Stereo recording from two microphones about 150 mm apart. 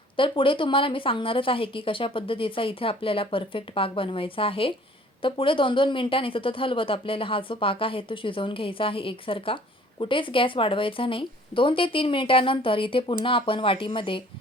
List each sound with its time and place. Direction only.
0.2 s a woman's voice: 35° left (ahead or behind)